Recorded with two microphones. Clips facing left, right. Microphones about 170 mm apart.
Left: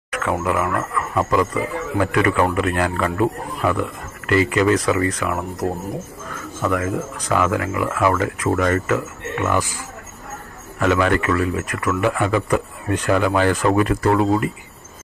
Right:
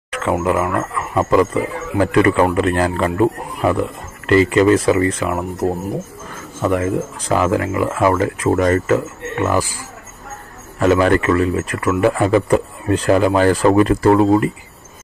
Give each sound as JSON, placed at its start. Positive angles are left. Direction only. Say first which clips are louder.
{"t": 0.1, "sound": "a man's voice", "louder": "right 4 dB", "side_deg": -25}
{"t": 10.8, "sound": "a man's voice", "louder": "right 4 dB", "side_deg": -35}